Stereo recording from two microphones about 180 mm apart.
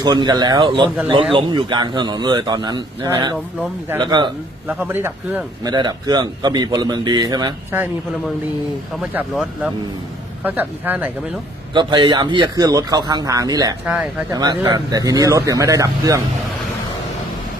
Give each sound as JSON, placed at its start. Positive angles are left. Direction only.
{"t": 0.0, "sound": "a man's voice", "side_deg": -20}
{"t": 4.7, "sound": "speech", "side_deg": -10}
{"t": 5.6, "sound": "a man's voice", "side_deg": -25}
{"t": 9.0, "sound": "speech", "side_deg": -5}
{"t": 11.7, "sound": "a man's voice", "side_deg": -25}
{"t": 13.8, "sound": "speech", "side_deg": -5}
{"t": 14.3, "sound": "a man's voice", "side_deg": -25}